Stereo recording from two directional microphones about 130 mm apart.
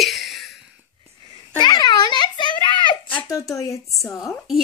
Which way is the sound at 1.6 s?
35° left (ahead or behind).